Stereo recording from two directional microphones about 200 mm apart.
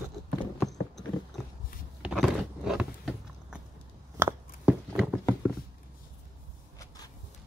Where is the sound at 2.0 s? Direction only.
Centre (ahead or behind).